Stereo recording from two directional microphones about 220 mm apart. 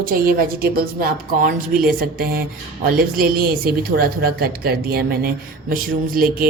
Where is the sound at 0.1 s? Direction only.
40° right (ahead or behind).